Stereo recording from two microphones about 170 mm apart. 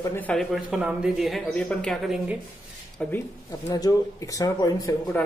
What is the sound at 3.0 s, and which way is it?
Speech, 15° left (ahead or behind).